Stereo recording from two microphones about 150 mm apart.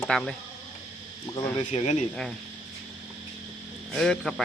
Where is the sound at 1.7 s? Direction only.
45° left (ahead or behind).